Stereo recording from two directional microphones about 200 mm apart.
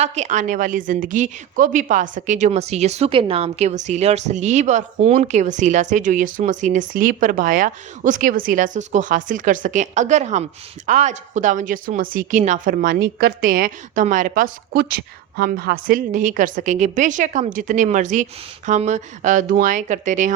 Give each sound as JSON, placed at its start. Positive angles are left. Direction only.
{"t": 0.0, "sound": "a woman's voice", "side_deg": -35}